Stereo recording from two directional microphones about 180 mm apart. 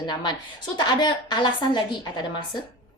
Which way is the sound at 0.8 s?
25° left (ahead or behind).